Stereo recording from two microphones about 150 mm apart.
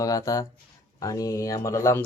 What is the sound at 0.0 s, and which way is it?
Speech, 25° left (ahead or behind).